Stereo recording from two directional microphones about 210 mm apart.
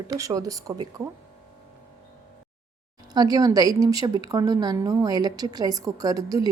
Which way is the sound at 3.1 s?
20° right (ahead or behind).